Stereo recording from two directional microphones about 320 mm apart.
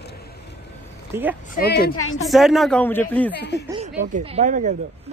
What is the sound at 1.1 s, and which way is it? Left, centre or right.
Speech, centre.